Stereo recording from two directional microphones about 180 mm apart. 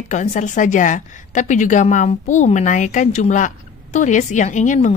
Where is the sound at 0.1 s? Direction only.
45° left (ahead or behind).